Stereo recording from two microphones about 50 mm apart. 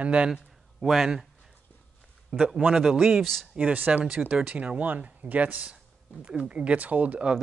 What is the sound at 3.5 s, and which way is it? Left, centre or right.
A man's voice, right.